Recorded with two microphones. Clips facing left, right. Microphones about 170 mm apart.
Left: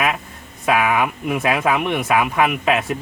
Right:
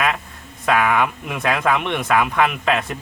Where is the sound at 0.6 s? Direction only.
5° left (ahead or behind).